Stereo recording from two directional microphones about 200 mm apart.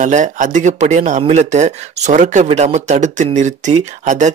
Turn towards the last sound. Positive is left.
turn(degrees=-35)  # may be behind; listen again after turning